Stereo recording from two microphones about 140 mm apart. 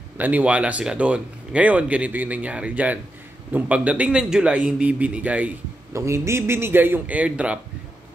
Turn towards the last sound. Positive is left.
turn(degrees=-10)  # may be behind; listen again after turning